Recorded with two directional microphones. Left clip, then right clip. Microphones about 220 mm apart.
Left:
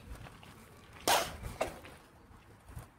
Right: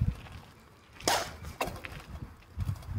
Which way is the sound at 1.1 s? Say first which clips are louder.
Even; centre (ahead or behind).